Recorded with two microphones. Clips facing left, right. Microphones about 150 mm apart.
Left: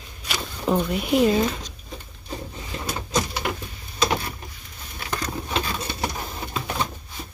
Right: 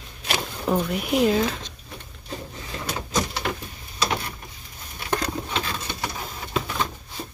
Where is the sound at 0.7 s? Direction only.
Centre (ahead or behind).